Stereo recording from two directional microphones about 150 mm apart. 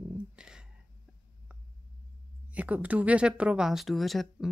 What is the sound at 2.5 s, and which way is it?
Speech, 10° right (ahead or behind).